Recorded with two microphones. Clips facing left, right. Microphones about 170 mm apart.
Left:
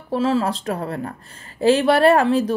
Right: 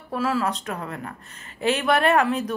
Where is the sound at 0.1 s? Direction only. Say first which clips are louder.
Left 5 dB; 30° left (ahead or behind).